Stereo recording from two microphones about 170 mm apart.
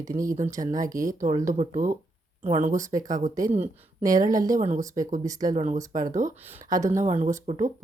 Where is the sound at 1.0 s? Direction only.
50° right (ahead or behind).